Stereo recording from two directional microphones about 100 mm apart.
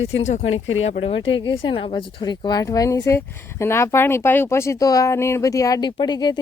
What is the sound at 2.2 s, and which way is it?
Speech, 45° left (ahead or behind).